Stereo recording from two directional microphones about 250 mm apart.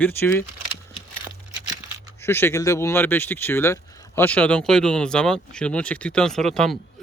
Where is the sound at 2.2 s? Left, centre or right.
Centre.